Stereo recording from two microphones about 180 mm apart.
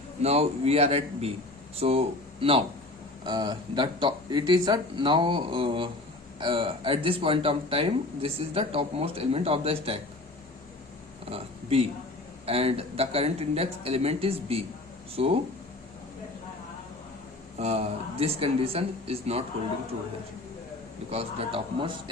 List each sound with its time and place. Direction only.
0.2 s speech: 35° right (ahead or behind)
11.3 s speech: 30° right (ahead or behind)
17.6 s speech: 35° right (ahead or behind)
21.1 s speech: 35° right (ahead or behind)